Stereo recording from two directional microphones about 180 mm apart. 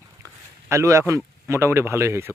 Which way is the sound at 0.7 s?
15° right (ahead or behind).